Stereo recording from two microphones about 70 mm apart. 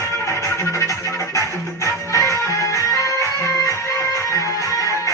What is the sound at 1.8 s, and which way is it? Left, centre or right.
Music, left.